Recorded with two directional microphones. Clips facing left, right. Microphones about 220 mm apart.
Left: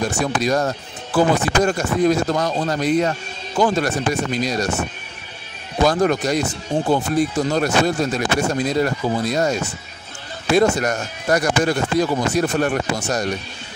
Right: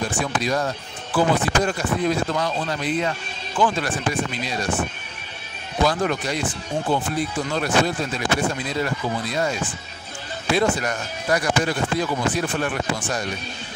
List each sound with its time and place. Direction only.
0.1 s speech: 40° left (ahead or behind)
5.9 s speech: 45° left (ahead or behind)